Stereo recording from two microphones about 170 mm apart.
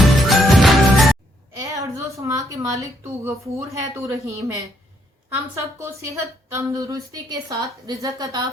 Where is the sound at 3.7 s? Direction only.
20° right (ahead or behind).